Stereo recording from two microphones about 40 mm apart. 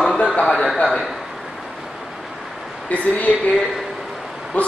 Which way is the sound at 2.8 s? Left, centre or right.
Left.